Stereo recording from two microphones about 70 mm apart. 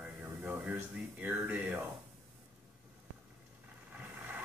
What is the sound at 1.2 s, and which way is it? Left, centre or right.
Speech, right.